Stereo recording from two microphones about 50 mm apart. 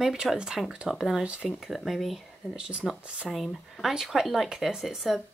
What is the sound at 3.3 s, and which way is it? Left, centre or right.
Speech, centre.